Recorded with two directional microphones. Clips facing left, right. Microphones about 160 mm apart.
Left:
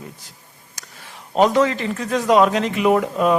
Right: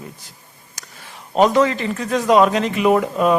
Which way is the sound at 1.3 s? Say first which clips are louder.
Right 1 dB; 15° right (ahead or behind).